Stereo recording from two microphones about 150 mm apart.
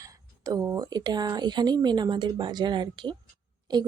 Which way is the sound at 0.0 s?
25° right (ahead or behind).